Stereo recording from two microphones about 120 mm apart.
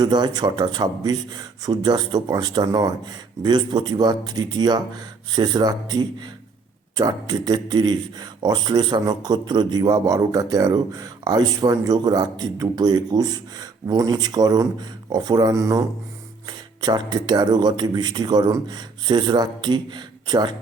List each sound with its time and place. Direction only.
0.0 s speech: 35° right (ahead or behind)